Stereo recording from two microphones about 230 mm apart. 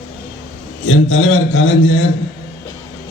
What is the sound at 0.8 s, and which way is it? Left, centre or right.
A man's voice, left.